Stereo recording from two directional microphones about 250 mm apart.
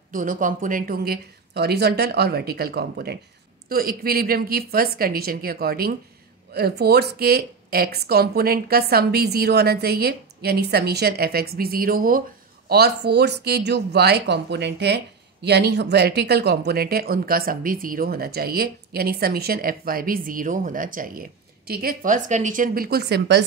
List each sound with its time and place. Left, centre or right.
0.1 s speech: right